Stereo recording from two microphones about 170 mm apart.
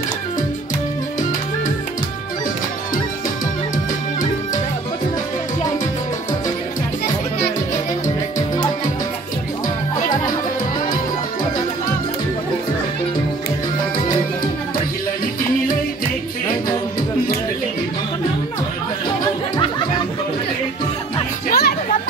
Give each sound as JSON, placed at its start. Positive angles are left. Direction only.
{"t": 21.5, "sound": "music", "side_deg": 65}